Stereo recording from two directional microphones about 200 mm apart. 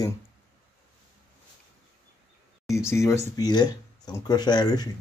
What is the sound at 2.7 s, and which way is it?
Speech, 15° left (ahead or behind).